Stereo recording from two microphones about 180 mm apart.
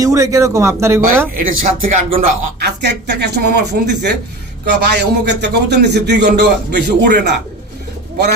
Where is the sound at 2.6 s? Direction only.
65° right (ahead or behind).